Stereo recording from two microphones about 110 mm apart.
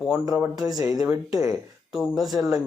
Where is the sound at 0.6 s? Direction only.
35° right (ahead or behind).